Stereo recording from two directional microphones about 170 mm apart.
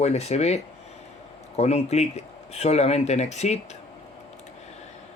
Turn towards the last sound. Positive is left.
turn(degrees=40)  # may be behind; listen again after turning